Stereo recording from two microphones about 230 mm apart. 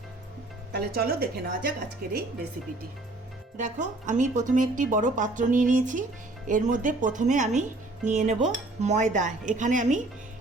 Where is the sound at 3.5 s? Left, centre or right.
Right.